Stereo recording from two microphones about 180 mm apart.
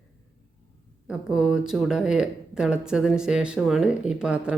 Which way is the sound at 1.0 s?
5° right (ahead or behind).